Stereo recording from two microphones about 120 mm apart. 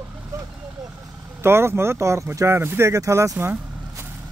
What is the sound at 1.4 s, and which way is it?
Speech, 20° right (ahead or behind).